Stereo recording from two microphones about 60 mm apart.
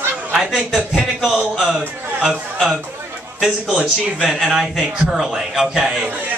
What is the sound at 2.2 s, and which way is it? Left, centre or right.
A man's voice, centre.